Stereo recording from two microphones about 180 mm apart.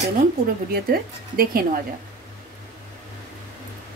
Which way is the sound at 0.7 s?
55° right (ahead or behind).